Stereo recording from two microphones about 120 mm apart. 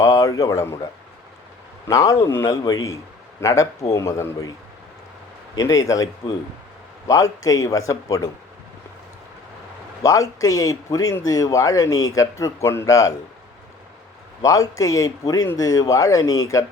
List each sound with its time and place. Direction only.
0.0 s a man's voice: 25° left (ahead or behind)
1.9 s speech: 25° left (ahead or behind)
5.5 s speech: 30° left (ahead or behind)
10.0 s speech: 25° left (ahead or behind)
14.4 s speech: 30° left (ahead or behind)